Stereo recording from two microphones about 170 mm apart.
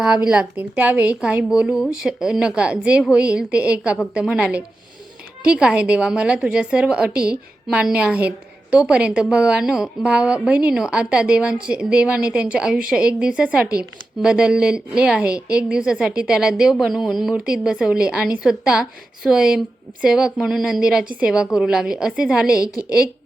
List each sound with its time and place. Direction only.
0.3 s a woman's voice: 10° right (ahead or behind)